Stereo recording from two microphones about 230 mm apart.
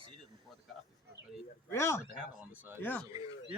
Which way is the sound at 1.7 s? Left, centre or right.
Centre.